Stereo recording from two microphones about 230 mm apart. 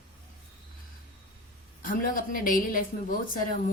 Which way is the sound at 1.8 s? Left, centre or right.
Left.